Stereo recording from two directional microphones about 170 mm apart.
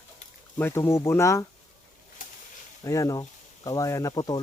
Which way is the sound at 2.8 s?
20° left (ahead or behind).